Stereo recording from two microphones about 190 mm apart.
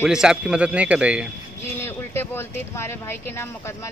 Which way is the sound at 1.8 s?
10° left (ahead or behind).